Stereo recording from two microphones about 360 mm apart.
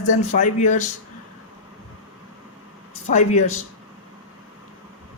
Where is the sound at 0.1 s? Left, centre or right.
Left.